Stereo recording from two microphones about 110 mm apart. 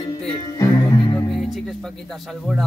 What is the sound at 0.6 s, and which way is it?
Music, 35° left (ahead or behind).